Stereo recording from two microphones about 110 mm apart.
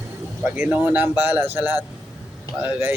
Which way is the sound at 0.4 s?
15° right (ahead or behind).